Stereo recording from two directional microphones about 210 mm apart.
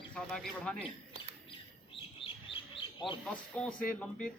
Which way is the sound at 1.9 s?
25° left (ahead or behind).